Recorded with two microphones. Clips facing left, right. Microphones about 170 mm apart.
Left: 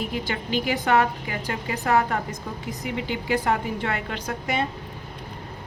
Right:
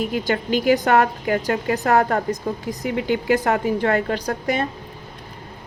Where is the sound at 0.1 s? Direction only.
45° right (ahead or behind).